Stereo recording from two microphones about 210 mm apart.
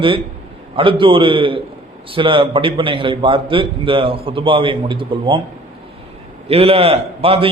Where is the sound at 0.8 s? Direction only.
25° right (ahead or behind).